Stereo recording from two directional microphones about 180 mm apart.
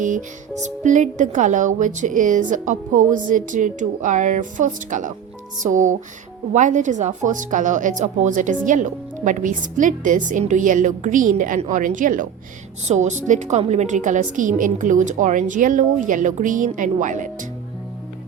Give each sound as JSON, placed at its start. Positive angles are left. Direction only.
{"t": 0.0, "sound": "a woman's voice", "side_deg": -45}